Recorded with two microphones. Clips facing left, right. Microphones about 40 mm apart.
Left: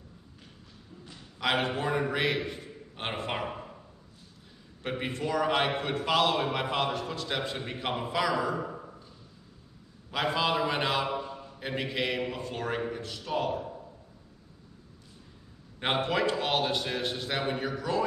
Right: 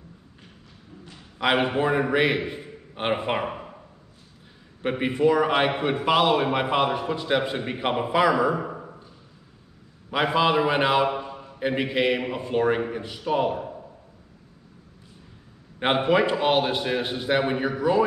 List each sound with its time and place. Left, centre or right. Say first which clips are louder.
1.4 s a man's voice: right 6 dB; right
3.4 s a sound: right 5 dB; right
4.8 s a man's voice: right 11 dB; centre
10.1 s a man's voice: right 7 dB; centre
15.8 s a man's voice: right 7 dB; right